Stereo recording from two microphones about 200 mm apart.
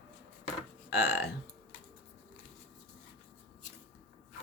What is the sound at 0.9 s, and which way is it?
Speech, 60° left (ahead or behind).